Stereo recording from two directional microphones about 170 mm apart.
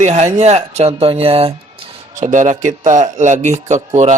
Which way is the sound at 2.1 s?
45° right (ahead or behind).